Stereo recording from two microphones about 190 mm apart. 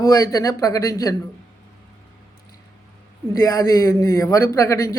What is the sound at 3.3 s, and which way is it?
Speech, 15° left (ahead or behind).